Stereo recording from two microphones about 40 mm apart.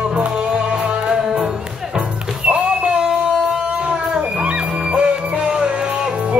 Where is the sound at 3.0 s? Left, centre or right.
Centre.